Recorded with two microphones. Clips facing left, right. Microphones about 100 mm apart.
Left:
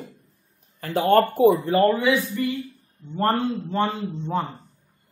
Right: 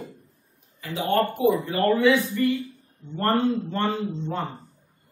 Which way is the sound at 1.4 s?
35° left (ahead or behind).